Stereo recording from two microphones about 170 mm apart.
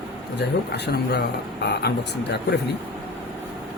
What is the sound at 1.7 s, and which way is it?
Speech, 80° left.